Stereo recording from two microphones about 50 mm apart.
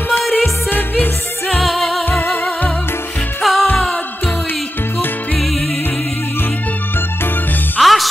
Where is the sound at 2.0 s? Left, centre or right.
Left.